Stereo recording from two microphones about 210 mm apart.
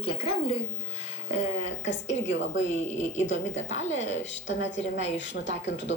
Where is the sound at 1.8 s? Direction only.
60° left (ahead or behind).